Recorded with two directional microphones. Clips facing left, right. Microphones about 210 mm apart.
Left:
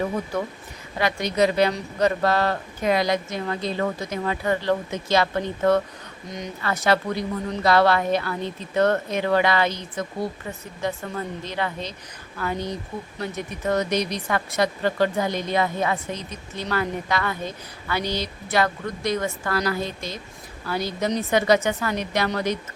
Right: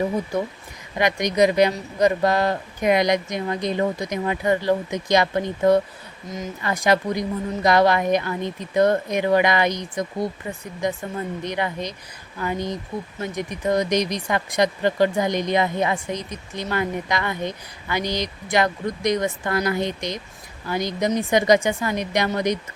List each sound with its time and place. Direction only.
0.9 s speech: 15° right (ahead or behind)
6.2 s speech: centre (ahead or behind)
6.6 s speech: 15° right (ahead or behind)